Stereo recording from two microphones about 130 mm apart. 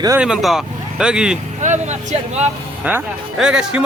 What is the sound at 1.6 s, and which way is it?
Speech, 65° right (ahead or behind).